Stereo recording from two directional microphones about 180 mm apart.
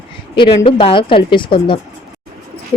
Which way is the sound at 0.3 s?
25° left (ahead or behind).